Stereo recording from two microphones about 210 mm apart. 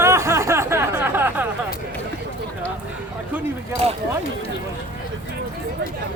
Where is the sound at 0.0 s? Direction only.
15° right (ahead or behind).